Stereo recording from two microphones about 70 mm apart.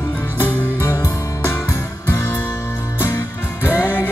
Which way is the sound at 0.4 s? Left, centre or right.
Left.